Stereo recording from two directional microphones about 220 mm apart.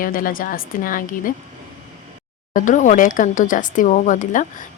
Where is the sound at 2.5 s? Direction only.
35° left (ahead or behind).